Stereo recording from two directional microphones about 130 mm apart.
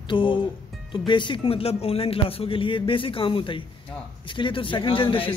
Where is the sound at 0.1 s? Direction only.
40° left (ahead or behind).